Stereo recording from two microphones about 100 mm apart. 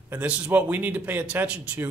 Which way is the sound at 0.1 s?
15° right (ahead or behind).